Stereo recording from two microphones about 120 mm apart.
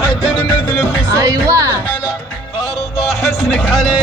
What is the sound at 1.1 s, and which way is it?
Speech, 30° right (ahead or behind).